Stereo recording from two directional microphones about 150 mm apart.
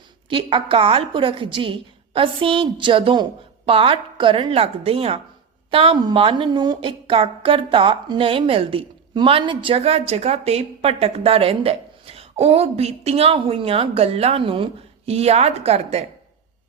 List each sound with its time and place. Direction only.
0.3 s a woman's voice: 35° right (ahead or behind)